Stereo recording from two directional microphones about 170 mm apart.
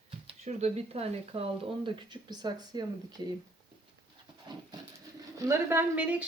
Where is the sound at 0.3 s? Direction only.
40° right (ahead or behind).